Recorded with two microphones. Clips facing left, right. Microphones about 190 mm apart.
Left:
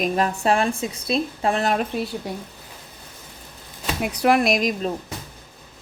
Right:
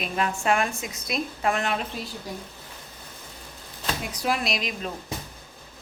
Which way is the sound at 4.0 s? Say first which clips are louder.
Left 10 dB; 65° left (ahead or behind).